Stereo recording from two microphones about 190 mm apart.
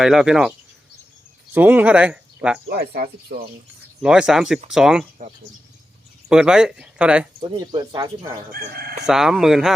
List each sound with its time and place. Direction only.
0.0 s speech: 5° right (ahead or behind)
1.5 s speech: 10° right (ahead or behind)
2.6 s speech: 55° right (ahead or behind)
4.0 s speech: 5° right (ahead or behind)
6.2 s speech: 5° right (ahead or behind)
7.4 s speech: 20° right (ahead or behind)
8.6 s chicken: 50° right (ahead or behind)
9.0 s speech: centre (ahead or behind)